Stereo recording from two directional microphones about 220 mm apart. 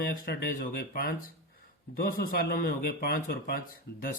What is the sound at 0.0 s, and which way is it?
A man's voice, 45° left (ahead or behind).